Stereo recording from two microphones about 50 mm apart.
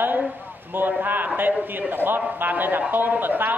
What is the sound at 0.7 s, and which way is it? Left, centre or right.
A woman's voice, right.